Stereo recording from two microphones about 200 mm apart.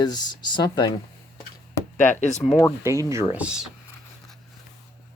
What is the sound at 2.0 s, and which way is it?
Speech, 40° left (ahead or behind).